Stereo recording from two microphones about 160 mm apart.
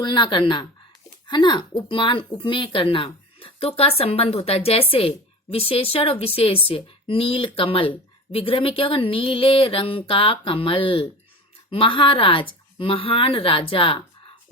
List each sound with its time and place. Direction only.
0.0 s a woman's voice: 30° left (ahead or behind)